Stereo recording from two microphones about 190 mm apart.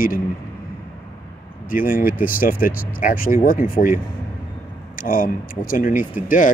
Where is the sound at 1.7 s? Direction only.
50° left (ahead or behind).